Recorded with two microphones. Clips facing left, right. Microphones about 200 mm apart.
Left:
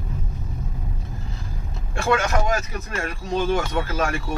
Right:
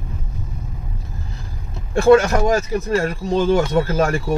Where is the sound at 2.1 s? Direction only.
35° right (ahead or behind).